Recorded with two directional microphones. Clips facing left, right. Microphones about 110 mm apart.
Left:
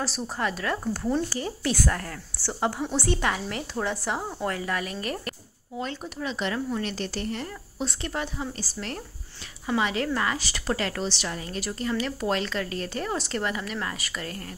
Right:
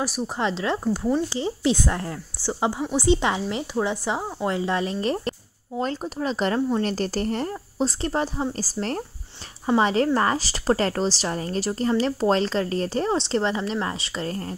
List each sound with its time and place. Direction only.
0.4 s a woman's voice: 25° right (ahead or behind)